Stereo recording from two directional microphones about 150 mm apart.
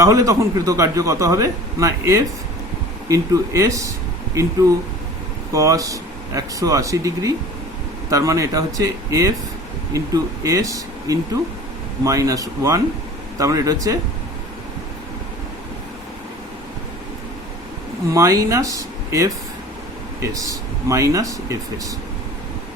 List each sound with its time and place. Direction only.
0.0 s a man's voice: 20° right (ahead or behind)
5.5 s a man's voice: 20° right (ahead or behind)
18.1 s a man's voice: 20° right (ahead or behind)
20.3 s a man's voice: 20° right (ahead or behind)